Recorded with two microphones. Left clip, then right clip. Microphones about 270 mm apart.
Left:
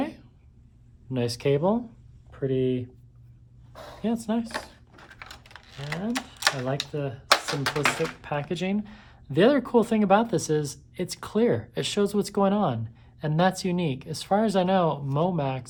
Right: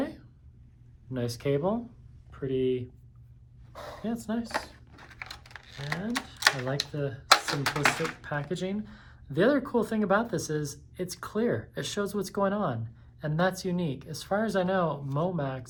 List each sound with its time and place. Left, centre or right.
0.0 s a sound: left
1.1 s speech: left
4.0 s speech: left
4.9 s typing: centre
6.7 s speech: centre
7.3 s speech: centre
8.2 s speech: left